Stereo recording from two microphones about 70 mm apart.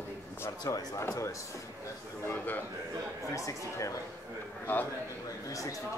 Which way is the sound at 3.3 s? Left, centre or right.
Left.